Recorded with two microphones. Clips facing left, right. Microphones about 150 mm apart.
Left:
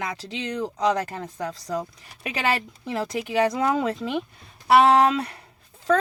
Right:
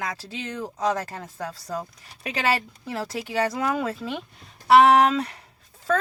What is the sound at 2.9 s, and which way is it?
Speech, 15° left (ahead or behind).